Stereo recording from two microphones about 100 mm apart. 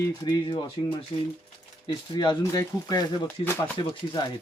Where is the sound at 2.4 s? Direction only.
35° left (ahead or behind).